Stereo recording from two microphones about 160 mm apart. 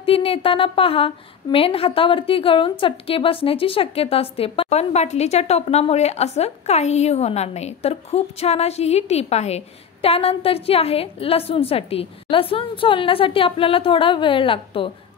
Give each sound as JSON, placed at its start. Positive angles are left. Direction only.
{"t": 0.0, "sound": "a woman's voice", "side_deg": 35}